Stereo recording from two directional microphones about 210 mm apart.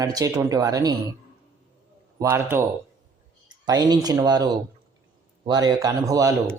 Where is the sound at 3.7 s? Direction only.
20° right (ahead or behind).